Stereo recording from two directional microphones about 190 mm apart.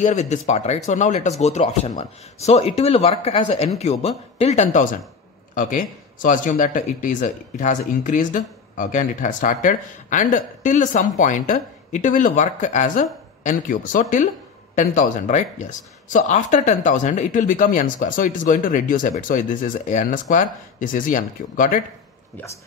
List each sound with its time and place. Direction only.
0.0 s speech: 40° left (ahead or behind)